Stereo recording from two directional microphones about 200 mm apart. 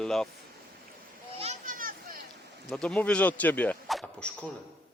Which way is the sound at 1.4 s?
40° right (ahead or behind).